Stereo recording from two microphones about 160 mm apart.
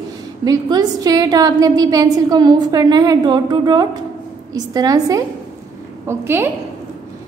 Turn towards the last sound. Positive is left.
turn(degrees=-15)  # may be behind; listen again after turning